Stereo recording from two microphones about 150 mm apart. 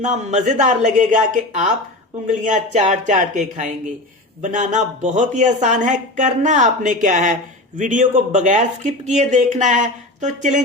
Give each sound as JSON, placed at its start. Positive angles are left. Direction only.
{"t": 0.0, "sound": "speech", "side_deg": -50}